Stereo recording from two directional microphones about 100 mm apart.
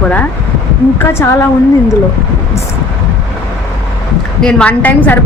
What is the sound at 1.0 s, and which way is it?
Speech, 25° left (ahead or behind).